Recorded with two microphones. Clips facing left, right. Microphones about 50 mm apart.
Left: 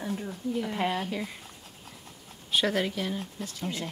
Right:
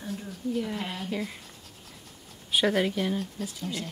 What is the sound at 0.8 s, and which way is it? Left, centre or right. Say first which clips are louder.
Speech: left 7 dB; centre.